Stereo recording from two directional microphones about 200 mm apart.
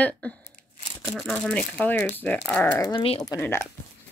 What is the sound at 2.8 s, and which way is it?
Speech, 25° left (ahead or behind).